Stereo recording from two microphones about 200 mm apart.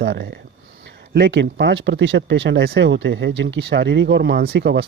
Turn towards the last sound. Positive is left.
turn(degrees=-60)  # may be behind; listen again after turning